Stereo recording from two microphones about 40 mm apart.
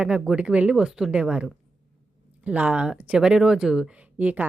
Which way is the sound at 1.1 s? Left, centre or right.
Right.